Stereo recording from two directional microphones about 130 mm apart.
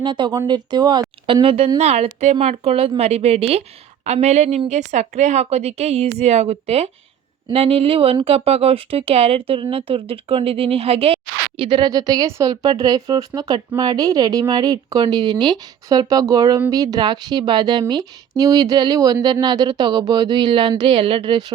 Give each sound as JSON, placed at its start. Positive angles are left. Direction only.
{"t": 0.0, "sound": "a woman's voice", "side_deg": -35}